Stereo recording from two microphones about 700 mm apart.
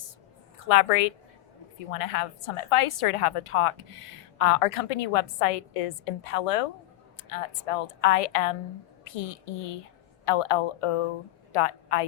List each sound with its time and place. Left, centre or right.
0.7 s a woman's voice: left